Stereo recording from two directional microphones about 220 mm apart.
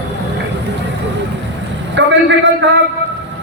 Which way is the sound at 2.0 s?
55° right (ahead or behind).